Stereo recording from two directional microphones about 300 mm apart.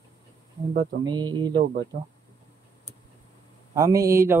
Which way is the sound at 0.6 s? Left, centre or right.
Right.